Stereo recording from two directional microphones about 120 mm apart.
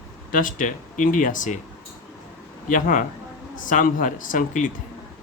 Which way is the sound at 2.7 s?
90° left.